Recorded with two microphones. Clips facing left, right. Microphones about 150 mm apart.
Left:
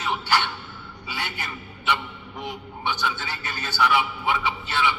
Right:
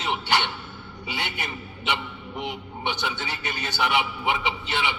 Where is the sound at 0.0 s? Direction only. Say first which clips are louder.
Left 1 dB; 20° right (ahead or behind).